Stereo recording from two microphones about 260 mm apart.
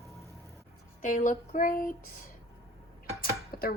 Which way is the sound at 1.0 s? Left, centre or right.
Left.